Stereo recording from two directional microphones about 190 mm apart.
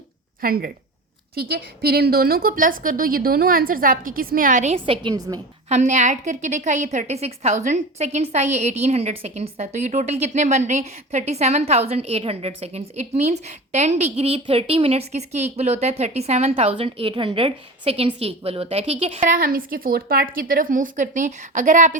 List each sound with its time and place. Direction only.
0.4 s a woman's voice: 50° right (ahead or behind); by 5.4 s 20° right (ahead or behind)
5.6 s a woman's voice: 40° right (ahead or behind)